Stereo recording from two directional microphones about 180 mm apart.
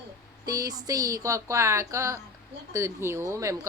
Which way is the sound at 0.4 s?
20° right (ahead or behind).